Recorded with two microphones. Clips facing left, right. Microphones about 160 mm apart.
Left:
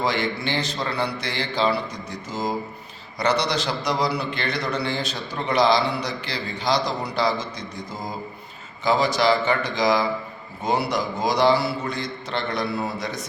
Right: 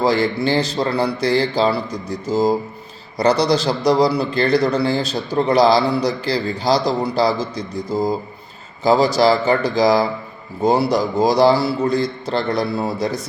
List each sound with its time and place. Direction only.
0.0 s a man's voice: 35° right (ahead or behind)